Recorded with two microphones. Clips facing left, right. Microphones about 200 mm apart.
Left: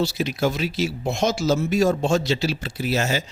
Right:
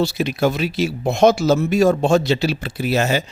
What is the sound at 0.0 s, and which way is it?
Speech, 60° right (ahead or behind).